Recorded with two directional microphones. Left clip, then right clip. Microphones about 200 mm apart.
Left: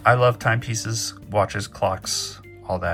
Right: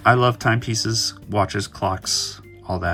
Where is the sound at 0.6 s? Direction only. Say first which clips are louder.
Right 6 dB; 15° right (ahead or behind).